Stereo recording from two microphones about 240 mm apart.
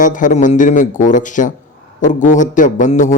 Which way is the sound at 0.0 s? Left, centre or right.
Left.